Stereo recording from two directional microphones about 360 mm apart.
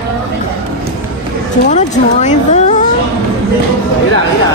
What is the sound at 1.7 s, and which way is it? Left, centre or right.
Cat, centre.